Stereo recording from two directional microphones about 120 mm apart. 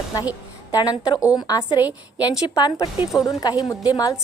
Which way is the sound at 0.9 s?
45° left (ahead or behind).